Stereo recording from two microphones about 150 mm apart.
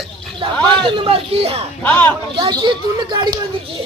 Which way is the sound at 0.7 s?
35° right (ahead or behind).